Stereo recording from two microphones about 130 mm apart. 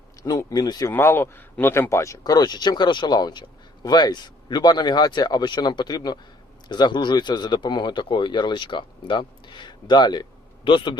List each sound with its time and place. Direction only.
0.2 s a man's voice: 30° left (ahead or behind)